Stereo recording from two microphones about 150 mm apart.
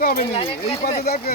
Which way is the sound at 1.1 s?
90° left.